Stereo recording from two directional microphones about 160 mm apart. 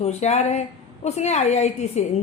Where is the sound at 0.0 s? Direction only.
45° left (ahead or behind).